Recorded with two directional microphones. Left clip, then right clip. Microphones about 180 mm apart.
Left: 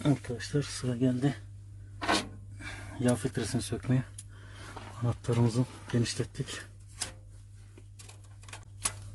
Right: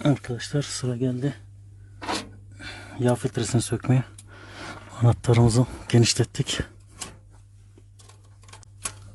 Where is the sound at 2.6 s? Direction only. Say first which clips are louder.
Right 6 dB; 45° right (ahead or behind).